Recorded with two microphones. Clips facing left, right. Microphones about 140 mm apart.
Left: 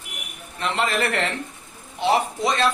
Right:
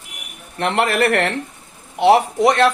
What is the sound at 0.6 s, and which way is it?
A man's voice, 65° right (ahead or behind).